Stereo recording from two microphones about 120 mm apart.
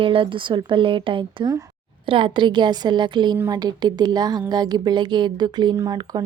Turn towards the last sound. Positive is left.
turn(degrees=-35)  # may be behind; listen again after turning